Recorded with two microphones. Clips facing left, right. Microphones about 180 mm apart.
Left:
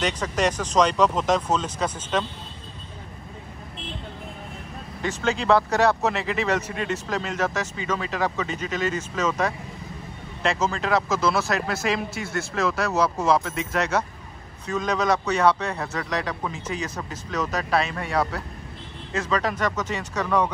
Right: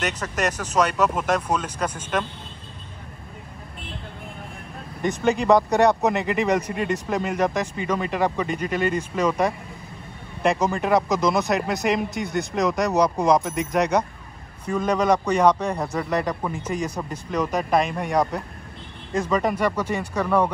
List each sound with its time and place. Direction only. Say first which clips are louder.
0.4 s speech: left 1 dB; 10° right (ahead or behind)
5.5 s speech: right 2 dB; 15° right (ahead or behind)